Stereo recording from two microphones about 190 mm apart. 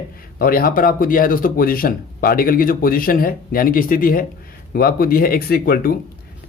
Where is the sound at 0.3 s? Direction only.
50° left (ahead or behind).